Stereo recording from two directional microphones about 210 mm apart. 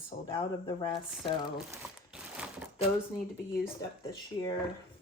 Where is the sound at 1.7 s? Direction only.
5° right (ahead or behind).